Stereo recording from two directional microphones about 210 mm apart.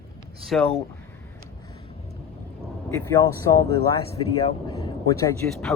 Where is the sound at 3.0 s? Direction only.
15° left (ahead or behind).